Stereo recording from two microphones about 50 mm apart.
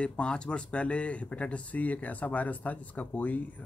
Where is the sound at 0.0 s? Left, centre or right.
Left.